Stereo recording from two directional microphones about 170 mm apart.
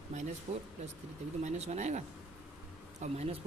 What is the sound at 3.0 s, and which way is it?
Speech, 40° right (ahead or behind).